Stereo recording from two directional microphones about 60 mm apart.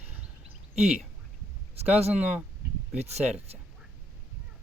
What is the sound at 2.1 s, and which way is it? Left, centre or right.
Speech, right.